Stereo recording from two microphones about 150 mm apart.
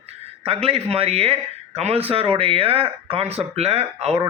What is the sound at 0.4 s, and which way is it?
Speech, 40° right (ahead or behind).